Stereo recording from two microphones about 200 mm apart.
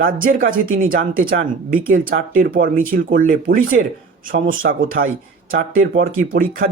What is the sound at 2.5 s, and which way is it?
Speech, 45° right (ahead or behind).